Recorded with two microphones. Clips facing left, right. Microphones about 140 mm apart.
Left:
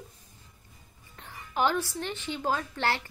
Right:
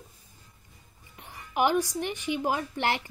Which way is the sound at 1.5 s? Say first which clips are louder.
Right 3 dB; 15° right (ahead or behind).